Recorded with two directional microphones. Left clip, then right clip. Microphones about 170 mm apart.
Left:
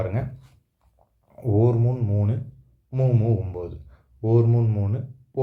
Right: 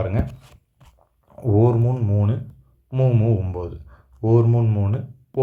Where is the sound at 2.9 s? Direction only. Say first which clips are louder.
Right 3 dB; 20° right (ahead or behind).